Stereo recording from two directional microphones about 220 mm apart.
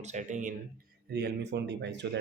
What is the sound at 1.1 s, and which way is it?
Speech, 50° right (ahead or behind).